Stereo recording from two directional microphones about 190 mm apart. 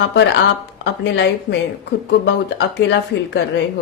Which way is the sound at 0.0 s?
65° left (ahead or behind).